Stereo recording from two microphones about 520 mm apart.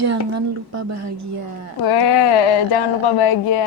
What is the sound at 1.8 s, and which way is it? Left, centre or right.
Speech, left.